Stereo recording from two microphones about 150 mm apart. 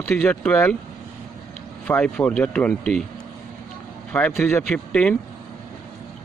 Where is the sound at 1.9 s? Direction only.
10° left (ahead or behind).